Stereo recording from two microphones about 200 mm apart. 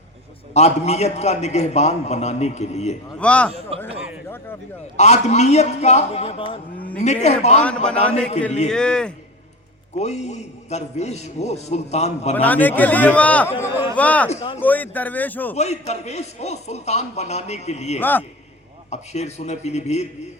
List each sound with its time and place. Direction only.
0.5 s a man's voice: 35° left (ahead or behind)
3.2 s a man's voice: 5° left (ahead or behind)
4.9 s a man's voice: 35° left (ahead or behind)
8.7 s a man's voice: 5° left (ahead or behind)
10.0 s a man's voice: 35° left (ahead or behind)
12.4 s a man's voice: 10° left (ahead or behind)
14.3 s a man's voice: 30° left (ahead or behind)
14.6 s a man's voice: 10° left (ahead or behind)
15.5 s a man's voice: 35° left (ahead or behind)
18.0 s a man's voice: 10° left (ahead or behind)
18.9 s a man's voice: 35° left (ahead or behind)